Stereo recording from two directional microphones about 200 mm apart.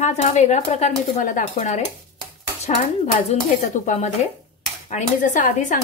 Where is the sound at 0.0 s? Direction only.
35° left (ahead or behind).